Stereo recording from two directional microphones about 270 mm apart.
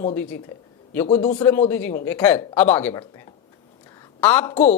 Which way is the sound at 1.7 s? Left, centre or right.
Centre.